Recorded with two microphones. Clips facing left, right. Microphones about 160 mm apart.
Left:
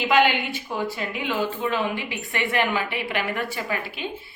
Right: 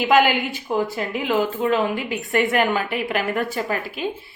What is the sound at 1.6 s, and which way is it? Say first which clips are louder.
A woman's voice: right 5 dB; 45° right (ahead or behind).